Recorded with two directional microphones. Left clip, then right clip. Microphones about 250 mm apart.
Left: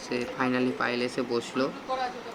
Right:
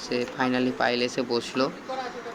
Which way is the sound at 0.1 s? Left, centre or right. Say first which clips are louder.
Right 2 dB; centre.